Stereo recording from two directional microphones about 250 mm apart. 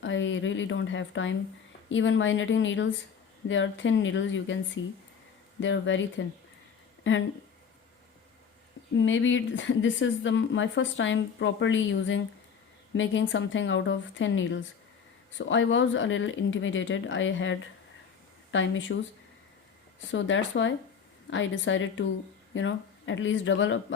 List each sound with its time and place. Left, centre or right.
0.0 s a woman's voice: left
9.0 s a woman's voice: left
20.0 s a woman's voice: left